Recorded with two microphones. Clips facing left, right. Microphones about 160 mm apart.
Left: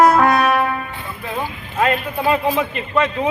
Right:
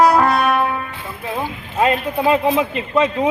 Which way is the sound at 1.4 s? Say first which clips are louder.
Right 1 dB; 20° right (ahead or behind).